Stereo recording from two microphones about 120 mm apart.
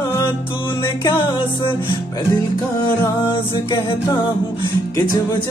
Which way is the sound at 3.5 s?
40° left (ahead or behind).